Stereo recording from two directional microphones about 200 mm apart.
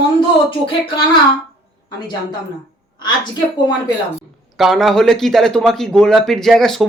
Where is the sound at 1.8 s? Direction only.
20° left (ahead or behind).